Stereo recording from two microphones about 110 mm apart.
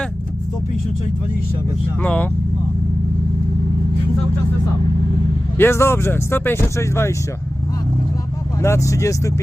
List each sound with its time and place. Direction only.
2.0 s speech: 15° left (ahead or behind)
5.5 s speech: 20° left (ahead or behind)
8.6 s speech: 25° left (ahead or behind)